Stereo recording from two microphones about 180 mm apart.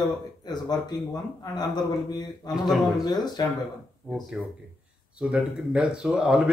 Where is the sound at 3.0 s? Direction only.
20° left (ahead or behind).